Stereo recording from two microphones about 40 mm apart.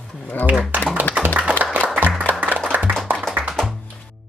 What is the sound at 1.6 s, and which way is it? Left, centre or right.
Music, right.